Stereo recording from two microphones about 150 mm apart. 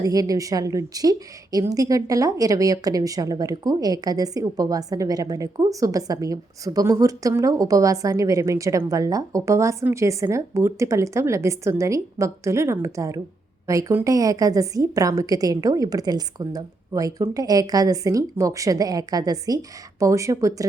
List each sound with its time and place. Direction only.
0.0 s a woman's voice: 25° right (ahead or behind)